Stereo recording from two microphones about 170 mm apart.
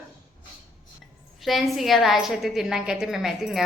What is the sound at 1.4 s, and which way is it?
A woman's voice, centre (ahead or behind).